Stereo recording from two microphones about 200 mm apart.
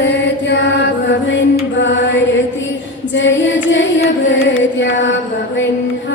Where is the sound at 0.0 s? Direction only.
60° left (ahead or behind).